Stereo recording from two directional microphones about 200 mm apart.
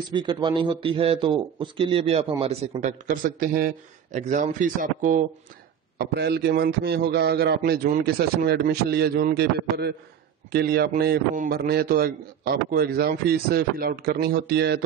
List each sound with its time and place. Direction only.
0.1 s a man's voice: 20° right (ahead or behind)
3.1 s a man's voice: 45° right (ahead or behind)
5.9 s a man's voice: 55° right (ahead or behind)